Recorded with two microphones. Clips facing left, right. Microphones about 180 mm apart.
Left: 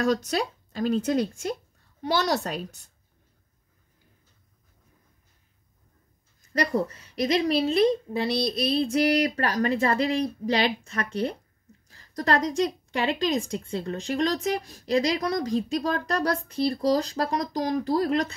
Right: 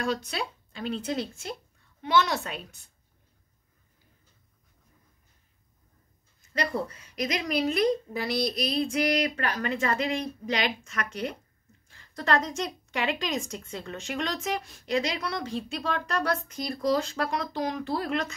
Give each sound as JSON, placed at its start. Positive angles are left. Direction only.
{"t": 0.0, "sound": "speech", "side_deg": 40}
{"t": 6.5, "sound": "a woman's voice", "side_deg": 40}